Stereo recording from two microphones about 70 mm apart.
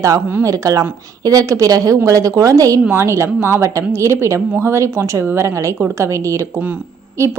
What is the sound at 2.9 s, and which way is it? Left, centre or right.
A woman's voice, right.